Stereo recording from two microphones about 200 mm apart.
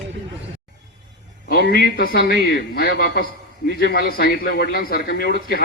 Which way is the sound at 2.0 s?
50° left (ahead or behind).